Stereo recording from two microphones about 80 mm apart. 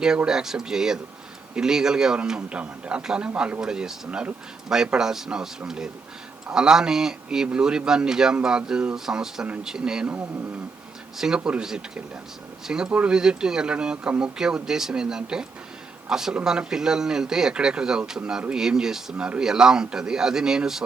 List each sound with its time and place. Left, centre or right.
0.3 s a man's voice: centre
11.2 s a man's voice: centre